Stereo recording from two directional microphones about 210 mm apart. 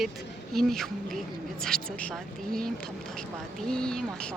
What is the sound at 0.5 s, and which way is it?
Speech, centre (ahead or behind).